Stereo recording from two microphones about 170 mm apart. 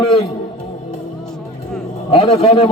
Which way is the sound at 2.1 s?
30° left (ahead or behind).